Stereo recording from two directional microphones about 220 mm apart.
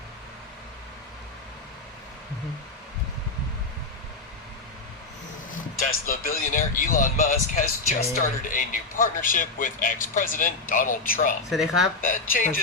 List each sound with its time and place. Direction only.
6.1 s speech: 40° left (ahead or behind)
11.4 s speech: centre (ahead or behind)
12.0 s speech: 40° left (ahead or behind)